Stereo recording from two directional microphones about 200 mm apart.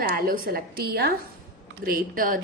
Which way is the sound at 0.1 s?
50° right (ahead or behind).